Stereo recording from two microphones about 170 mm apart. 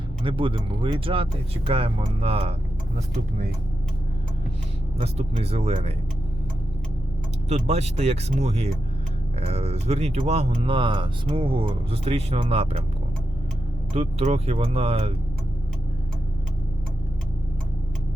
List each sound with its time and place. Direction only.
0.2 s speech: 30° right (ahead or behind)
4.9 s speech: 40° right (ahead or behind)
7.4 s speech: 40° right (ahead or behind)
13.9 s speech: 40° right (ahead or behind)